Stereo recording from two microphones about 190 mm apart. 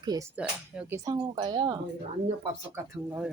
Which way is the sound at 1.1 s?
25° right (ahead or behind).